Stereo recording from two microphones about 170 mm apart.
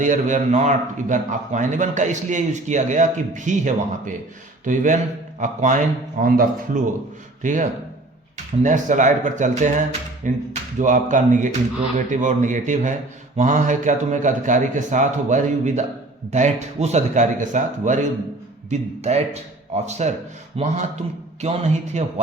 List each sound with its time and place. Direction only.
0.0 s a man's voice: 50° right (ahead or behind)